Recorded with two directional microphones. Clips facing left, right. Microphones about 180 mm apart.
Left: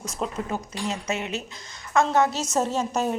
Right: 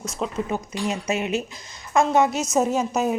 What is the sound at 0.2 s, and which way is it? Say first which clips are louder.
Speech: right 2 dB; centre (ahead or behind).